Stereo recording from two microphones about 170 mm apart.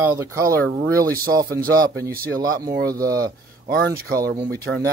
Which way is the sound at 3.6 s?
60° right (ahead or behind).